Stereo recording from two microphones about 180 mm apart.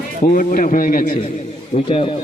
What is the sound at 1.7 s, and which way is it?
Speech, 30° left (ahead or behind).